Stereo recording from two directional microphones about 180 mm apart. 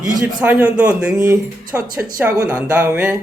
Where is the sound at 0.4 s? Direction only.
5° right (ahead or behind).